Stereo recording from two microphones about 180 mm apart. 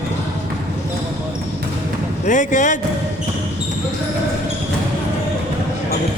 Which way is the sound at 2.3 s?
45° left (ahead or behind).